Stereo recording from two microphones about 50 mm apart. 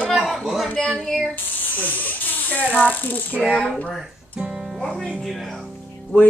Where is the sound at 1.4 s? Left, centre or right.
Left.